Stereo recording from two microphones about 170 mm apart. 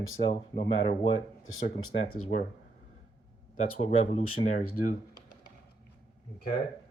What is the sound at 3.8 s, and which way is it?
Speech, 40° left (ahead or behind).